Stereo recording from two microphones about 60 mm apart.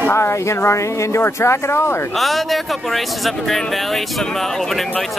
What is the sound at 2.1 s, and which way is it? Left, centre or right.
Speech, centre.